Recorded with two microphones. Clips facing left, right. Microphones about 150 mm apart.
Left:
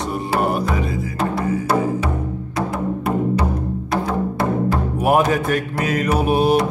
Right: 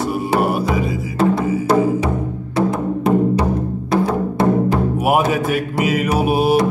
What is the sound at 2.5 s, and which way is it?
Music, 20° right (ahead or behind).